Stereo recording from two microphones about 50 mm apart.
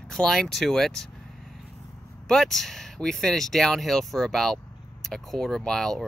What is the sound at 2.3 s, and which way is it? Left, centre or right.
Speech, centre.